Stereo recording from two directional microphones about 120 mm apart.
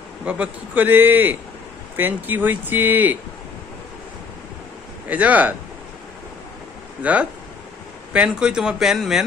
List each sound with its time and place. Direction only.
0.2 s a man's voice: 10° right (ahead or behind)
5.0 s a man's voice: 10° right (ahead or behind)
7.0 s a man's voice: 10° right (ahead or behind)